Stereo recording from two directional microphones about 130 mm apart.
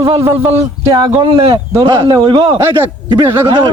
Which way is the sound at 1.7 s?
30° right (ahead or behind).